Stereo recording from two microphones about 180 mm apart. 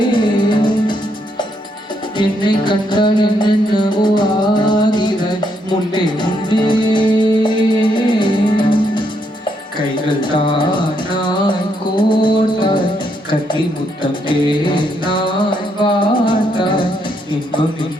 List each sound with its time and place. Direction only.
0.0 s music: 25° left (ahead or behind)
2.1 s music: 25° left (ahead or behind)
14.0 s music: 25° left (ahead or behind)